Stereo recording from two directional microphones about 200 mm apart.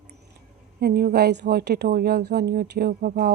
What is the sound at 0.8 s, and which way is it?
Speech, 50° right (ahead or behind).